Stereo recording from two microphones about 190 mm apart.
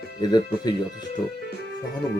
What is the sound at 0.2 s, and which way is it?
Speech, 20° left (ahead or behind).